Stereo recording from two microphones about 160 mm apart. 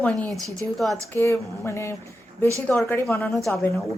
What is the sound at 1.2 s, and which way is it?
A woman's voice, 15° left (ahead or behind).